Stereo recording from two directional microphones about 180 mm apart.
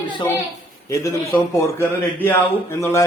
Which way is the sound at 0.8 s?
15° left (ahead or behind).